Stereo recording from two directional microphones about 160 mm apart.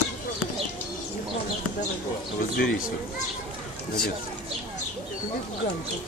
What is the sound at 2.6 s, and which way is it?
Speech, 60° left (ahead or behind).